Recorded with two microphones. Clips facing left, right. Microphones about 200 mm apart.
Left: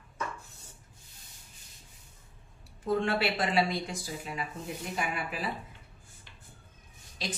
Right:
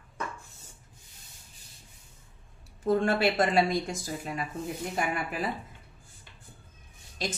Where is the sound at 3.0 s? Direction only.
45° right (ahead or behind).